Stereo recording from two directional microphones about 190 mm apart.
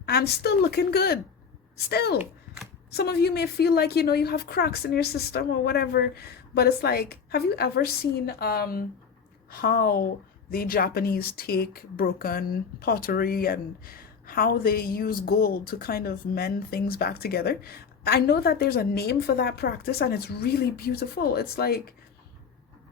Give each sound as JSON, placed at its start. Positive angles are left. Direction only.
{"t": 0.0, "sound": "a woman's voice", "side_deg": 55}